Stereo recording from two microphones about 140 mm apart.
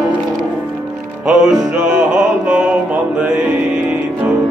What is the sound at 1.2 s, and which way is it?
Music, 5° right (ahead or behind).